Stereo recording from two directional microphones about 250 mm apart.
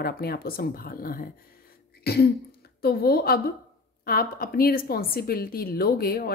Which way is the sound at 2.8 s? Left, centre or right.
Left.